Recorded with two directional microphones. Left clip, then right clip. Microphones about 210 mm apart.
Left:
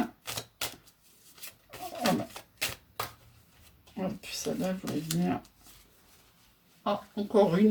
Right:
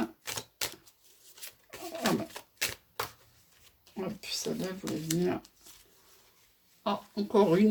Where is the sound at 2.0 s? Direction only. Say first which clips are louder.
Left 2 dB; 30° right (ahead or behind).